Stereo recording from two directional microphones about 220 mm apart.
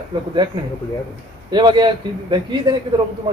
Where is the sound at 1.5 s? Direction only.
20° right (ahead or behind).